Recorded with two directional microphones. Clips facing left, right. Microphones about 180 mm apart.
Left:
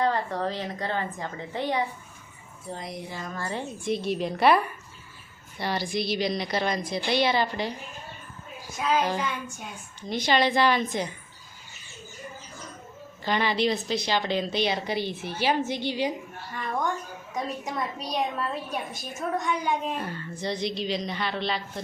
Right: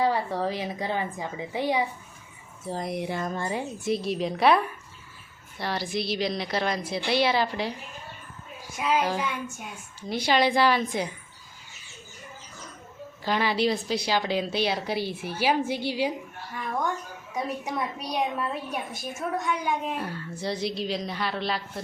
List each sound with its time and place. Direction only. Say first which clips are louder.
0.0 s a woman's voice: right 1 dB; 10° right (ahead or behind)
2.8 s speech: right 9 dB; 60° right (ahead or behind)
3.3 s a woman's voice: right 2 dB; 15° right (ahead or behind)
8.7 s a woman's voice: even; 10° right (ahead or behind)
13.2 s a woman's voice: even; 5° right (ahead or behind)